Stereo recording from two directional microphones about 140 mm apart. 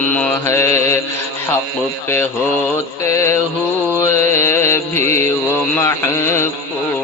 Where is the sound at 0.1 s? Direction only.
10° left (ahead or behind).